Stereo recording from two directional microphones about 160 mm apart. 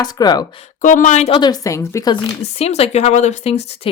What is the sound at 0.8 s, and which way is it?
Speech, 55° left (ahead or behind).